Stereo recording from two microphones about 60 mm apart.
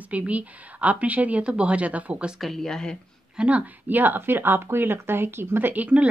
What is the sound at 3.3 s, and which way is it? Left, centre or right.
Speech, right.